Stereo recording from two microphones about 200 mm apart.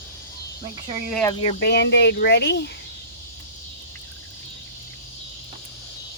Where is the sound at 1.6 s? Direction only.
55° left (ahead or behind).